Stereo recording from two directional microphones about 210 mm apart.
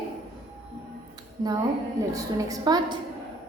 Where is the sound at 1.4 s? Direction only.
20° right (ahead or behind).